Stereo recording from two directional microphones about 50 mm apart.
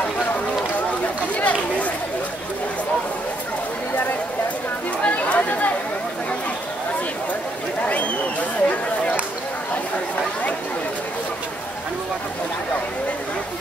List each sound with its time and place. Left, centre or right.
1.3 s chatter: left
5.0 s chatter: left